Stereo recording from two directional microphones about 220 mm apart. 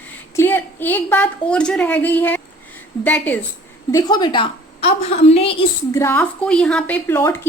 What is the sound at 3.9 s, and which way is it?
A woman's voice, 15° left (ahead or behind).